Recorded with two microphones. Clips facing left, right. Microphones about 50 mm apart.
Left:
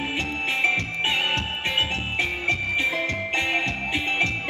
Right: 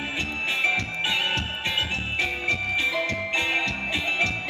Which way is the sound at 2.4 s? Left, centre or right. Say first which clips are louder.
Left 2 dB; left.